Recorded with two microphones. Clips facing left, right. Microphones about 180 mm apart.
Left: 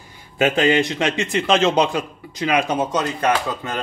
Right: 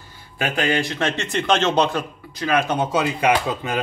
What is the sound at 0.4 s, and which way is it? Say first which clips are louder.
A man's voice: left 5 dB; 20° left (ahead or behind).